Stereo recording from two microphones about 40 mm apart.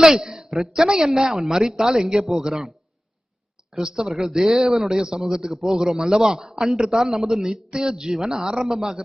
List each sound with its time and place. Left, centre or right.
0.0 s a sound: centre
0.5 s a man's voice: centre
3.8 s a man's voice: centre